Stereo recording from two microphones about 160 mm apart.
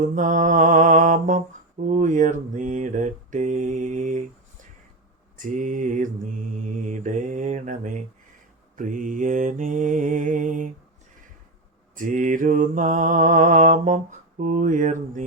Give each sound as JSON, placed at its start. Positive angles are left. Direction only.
{"t": 0.2, "sound": "mantra", "side_deg": -50}
{"t": 5.4, "sound": "mantra", "side_deg": -55}
{"t": 11.9, "sound": "mantra", "side_deg": -50}